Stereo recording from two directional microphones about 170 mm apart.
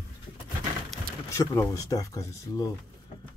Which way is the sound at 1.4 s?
20° left (ahead or behind).